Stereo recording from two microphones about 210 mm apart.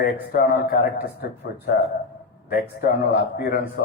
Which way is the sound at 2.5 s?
50° left (ahead or behind).